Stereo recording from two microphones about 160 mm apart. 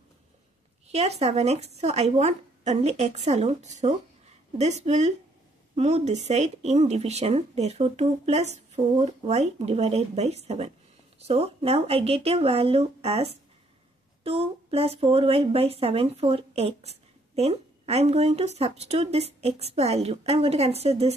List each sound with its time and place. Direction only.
0.8 s speech: 40° right (ahead or behind)